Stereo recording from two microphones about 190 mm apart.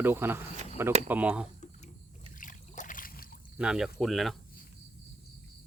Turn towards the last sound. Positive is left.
turn(degrees=0)  # may be behind; listen again after turning